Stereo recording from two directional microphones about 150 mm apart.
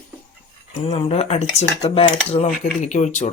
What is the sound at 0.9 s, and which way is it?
Speech, 45° left (ahead or behind).